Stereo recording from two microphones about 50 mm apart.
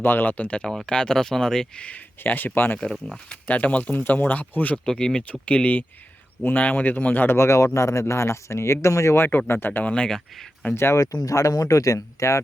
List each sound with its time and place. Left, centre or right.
0.0 s speech: left
0.3 s speech: left
2.2 s speech: left
3.4 s speech: left
4.9 s speech: centre
5.3 s speech: left
7.3 s speech: left
9.5 s speech: left
9.8 s speech: left
10.8 s speech: left